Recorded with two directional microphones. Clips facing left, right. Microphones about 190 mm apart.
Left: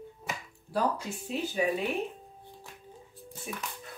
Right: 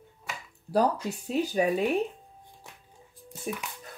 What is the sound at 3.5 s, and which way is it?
Speech, 45° right (ahead or behind).